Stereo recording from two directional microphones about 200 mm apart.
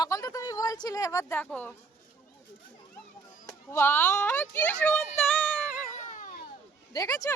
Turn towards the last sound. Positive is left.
turn(degrees=15)  # may be behind; listen again after turning